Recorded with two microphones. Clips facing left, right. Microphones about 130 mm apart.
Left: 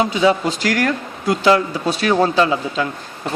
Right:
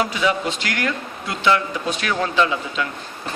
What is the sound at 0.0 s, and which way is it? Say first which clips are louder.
Speech: left 5 dB; 30° left (ahead or behind).